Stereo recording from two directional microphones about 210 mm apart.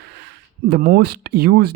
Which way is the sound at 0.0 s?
55° right (ahead or behind).